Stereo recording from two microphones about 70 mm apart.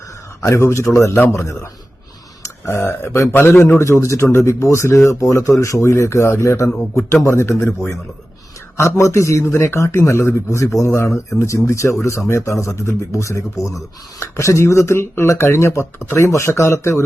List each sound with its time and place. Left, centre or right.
0.4 s speech: left
8.8 s speech: left